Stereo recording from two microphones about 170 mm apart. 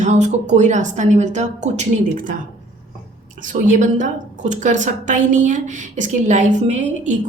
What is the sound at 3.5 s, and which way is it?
A woman's voice, 45° right (ahead or behind).